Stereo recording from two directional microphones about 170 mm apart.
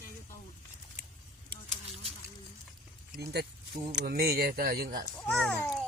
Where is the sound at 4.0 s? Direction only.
65° right (ahead or behind).